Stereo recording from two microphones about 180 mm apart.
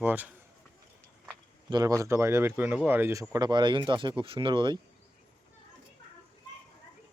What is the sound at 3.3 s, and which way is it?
Speech, 25° right (ahead or behind).